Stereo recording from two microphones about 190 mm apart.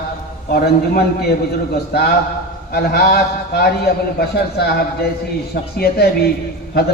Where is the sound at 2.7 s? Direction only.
55° left (ahead or behind).